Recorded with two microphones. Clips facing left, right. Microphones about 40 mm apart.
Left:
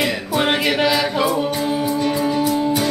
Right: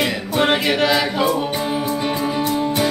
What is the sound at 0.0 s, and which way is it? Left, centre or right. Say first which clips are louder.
Music: right 1 dB; centre.